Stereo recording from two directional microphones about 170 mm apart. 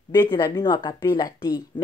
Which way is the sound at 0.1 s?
25° left (ahead or behind).